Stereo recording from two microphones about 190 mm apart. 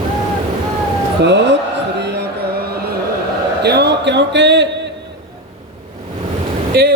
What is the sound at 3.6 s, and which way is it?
Speech, 60° right (ahead or behind).